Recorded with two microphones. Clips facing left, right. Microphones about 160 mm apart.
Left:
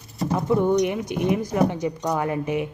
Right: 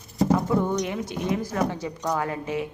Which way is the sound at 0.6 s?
15° left (ahead or behind).